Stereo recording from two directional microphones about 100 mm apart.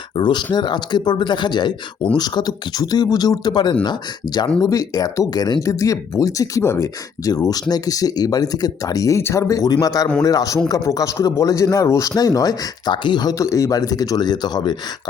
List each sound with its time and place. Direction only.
0.2 s speech: 50° left (ahead or behind)
4.6 s speech: 35° left (ahead or behind)